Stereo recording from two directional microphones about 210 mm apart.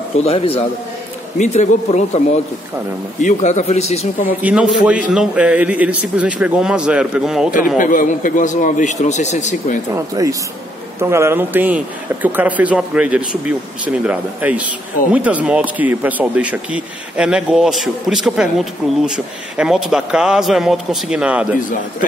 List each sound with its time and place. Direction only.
0.2 s a man's voice: 30° left (ahead or behind)
4.4 s speech: 5° right (ahead or behind)
7.7 s a man's voice: 40° left (ahead or behind)
9.9 s speech: 15° right (ahead or behind)